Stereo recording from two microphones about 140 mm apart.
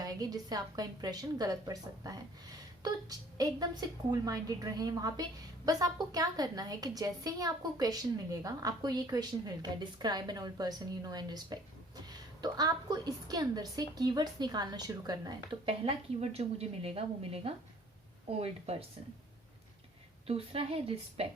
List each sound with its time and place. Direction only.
0.0 s a woman's voice: 25° right (ahead or behind); by 18.9 s 45° right (ahead or behind)
20.2 s a woman's voice: 45° right (ahead or behind)